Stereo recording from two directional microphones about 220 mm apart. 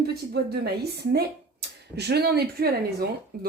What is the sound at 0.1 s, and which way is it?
Speech, 45° right (ahead or behind).